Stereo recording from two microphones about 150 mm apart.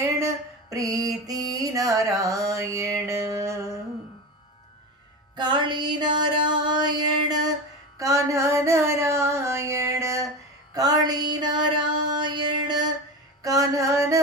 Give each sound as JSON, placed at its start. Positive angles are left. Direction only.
{"t": 0.7, "sound": "music", "side_deg": -25}
{"t": 5.4, "sound": "music", "side_deg": -30}
{"t": 7.9, "sound": "a sound", "side_deg": -20}
{"t": 12.1, "sound": "music", "side_deg": -30}